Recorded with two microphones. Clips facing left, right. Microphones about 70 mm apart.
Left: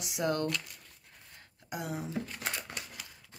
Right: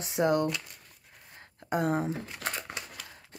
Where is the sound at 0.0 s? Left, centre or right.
Right.